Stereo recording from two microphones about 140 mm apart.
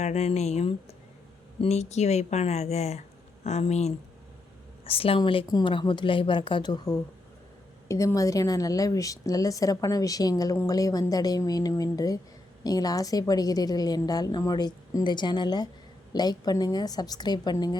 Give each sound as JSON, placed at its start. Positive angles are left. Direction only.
{"t": 0.0, "sound": "a woman's voice", "side_deg": 50}